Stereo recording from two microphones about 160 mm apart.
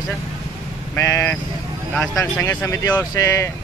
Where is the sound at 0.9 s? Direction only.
15° left (ahead or behind).